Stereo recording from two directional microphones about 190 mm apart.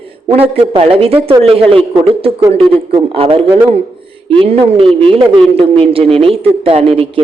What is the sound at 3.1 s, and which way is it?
A man's voice, 30° right (ahead or behind).